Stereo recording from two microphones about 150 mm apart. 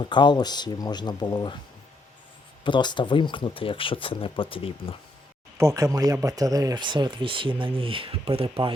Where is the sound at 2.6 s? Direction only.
30° left (ahead or behind).